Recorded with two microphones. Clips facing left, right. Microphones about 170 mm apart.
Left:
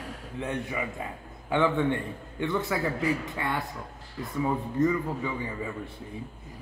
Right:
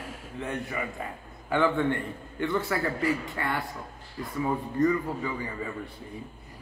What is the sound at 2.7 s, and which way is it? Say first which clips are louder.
Speech: even; 10° left (ahead or behind).